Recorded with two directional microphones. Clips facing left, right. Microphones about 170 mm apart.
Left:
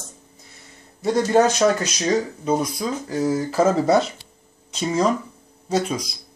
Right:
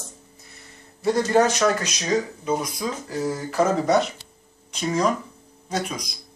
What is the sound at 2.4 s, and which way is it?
Speech, 35° left (ahead or behind).